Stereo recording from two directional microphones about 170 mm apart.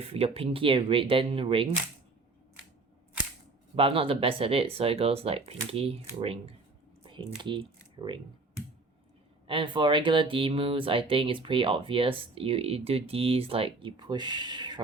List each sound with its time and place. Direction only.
0.0 s speech: 35° right (ahead or behind)
3.8 s speech: 35° right (ahead or behind)
7.0 s typing: 30° right (ahead or behind)
7.3 s speech: 30° right (ahead or behind)
9.5 s speech: 30° right (ahead or behind)